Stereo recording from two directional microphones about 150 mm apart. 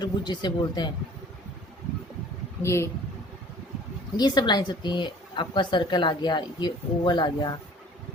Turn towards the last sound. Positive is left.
turn(degrees=30)  # may be behind; listen again after turning